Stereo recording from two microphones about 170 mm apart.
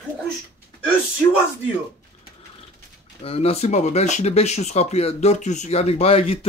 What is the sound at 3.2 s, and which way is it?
Speech, 35° left (ahead or behind).